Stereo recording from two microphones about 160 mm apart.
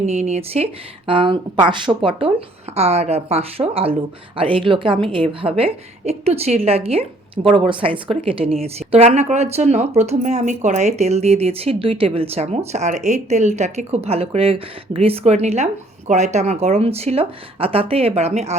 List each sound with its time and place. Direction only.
0.0 s speech: 40° right (ahead or behind)